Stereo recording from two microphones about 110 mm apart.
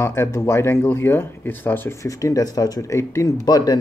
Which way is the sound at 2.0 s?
30° left (ahead or behind).